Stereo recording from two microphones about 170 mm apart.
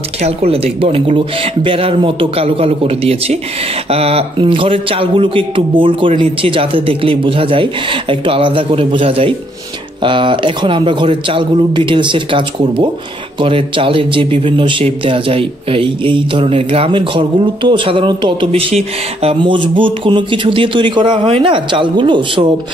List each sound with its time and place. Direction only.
0.2 s speech: 35° right (ahead or behind)